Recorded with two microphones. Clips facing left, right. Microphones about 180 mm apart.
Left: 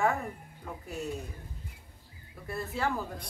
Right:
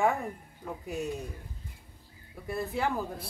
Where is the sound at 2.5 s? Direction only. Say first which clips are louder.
Right 2 dB; 15° right (ahead or behind).